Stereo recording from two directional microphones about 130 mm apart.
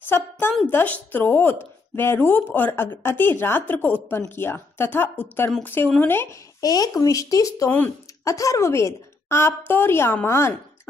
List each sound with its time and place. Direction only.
0.7 s a woman's voice: 15° left (ahead or behind)
6.6 s a woman's voice: 30° left (ahead or behind)